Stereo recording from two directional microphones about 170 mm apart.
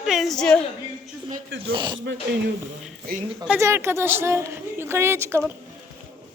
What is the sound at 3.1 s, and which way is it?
Speech, 65° right (ahead or behind).